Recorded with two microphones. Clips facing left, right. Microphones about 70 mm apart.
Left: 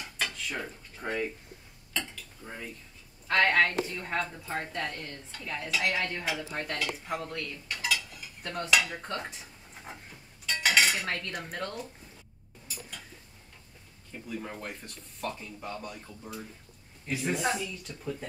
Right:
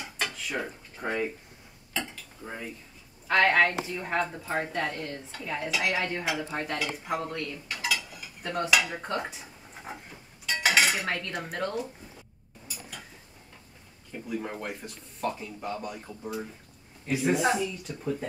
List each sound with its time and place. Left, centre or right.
0.0 s dishes: centre
2.4 s speech: centre
9.8 s dishes: centre
14.1 s speech: centre